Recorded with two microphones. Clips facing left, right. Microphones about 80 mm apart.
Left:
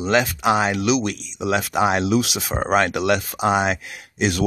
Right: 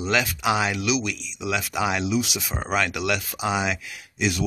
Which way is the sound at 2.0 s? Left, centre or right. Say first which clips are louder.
Left 5 dB; left.